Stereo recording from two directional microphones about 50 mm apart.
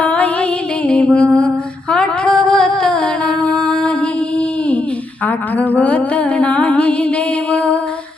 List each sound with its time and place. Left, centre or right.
0.0 s music: left
5.2 s humming: left